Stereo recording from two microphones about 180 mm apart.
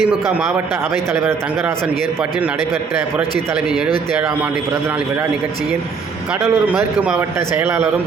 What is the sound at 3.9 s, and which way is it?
Speech, 30° right (ahead or behind).